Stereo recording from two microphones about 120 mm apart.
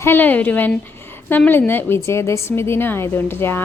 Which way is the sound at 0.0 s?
15° left (ahead or behind).